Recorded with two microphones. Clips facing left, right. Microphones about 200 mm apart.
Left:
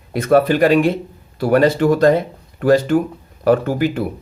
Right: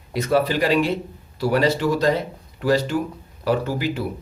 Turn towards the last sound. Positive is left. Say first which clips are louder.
# left 6 dB
turn(degrees=50)  # may be behind; listen again after turning